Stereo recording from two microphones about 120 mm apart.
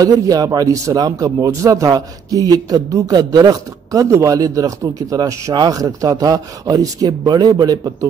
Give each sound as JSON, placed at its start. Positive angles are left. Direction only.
{"t": 0.0, "sound": "a man's voice", "side_deg": -30}